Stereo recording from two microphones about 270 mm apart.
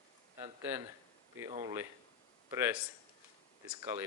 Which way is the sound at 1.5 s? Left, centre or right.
Centre.